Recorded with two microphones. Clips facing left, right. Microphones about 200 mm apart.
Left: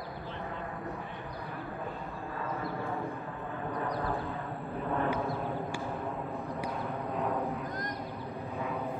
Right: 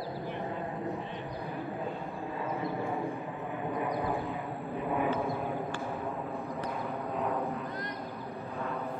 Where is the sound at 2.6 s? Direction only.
15° right (ahead or behind).